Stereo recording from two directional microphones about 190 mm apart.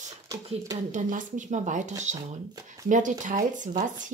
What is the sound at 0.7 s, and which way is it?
Speech, 40° right (ahead or behind).